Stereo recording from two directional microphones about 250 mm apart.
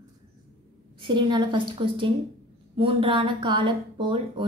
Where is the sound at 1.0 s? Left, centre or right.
Centre.